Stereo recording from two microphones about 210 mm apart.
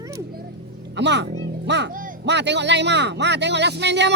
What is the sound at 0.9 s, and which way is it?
Speech, 55° right (ahead or behind).